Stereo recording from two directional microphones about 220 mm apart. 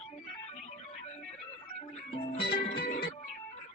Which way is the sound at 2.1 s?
20° left (ahead or behind).